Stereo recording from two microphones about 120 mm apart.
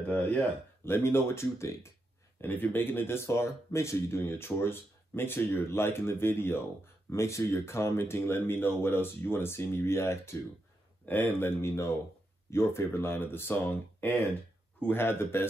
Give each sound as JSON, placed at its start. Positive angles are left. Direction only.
{"t": 0.1, "sound": "speech", "side_deg": 15}